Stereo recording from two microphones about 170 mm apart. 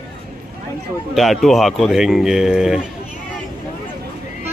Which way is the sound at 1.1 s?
Centre (ahead or behind).